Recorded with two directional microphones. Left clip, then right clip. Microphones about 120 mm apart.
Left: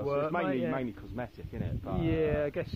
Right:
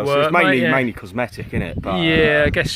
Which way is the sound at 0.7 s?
75° right (ahead or behind).